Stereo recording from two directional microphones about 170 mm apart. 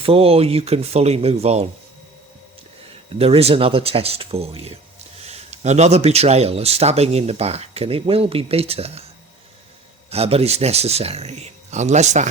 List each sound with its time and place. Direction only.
0.0 s speech: 35° right (ahead or behind)
3.2 s speech: 35° right (ahead or behind)
10.1 s speech: 35° right (ahead or behind)